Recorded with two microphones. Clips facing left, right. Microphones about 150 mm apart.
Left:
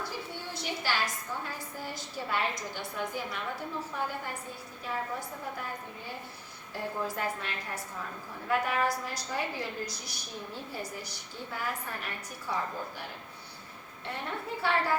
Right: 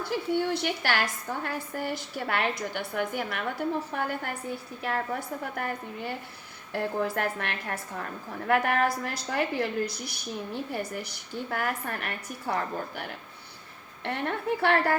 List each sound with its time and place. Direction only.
0.1 s a woman's voice: 70° right (ahead or behind)